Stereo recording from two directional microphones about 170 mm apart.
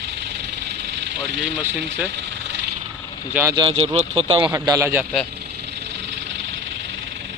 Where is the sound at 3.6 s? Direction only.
35° right (ahead or behind).